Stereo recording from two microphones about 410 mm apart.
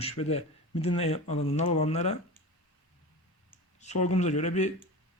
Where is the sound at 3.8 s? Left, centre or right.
Centre.